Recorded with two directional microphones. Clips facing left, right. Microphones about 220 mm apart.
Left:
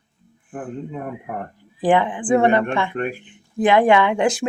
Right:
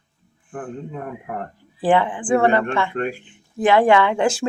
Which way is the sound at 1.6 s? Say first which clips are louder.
Even; 15° left (ahead or behind).